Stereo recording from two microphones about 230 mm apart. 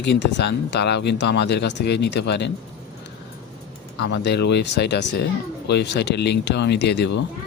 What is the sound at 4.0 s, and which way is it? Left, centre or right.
Speech, left.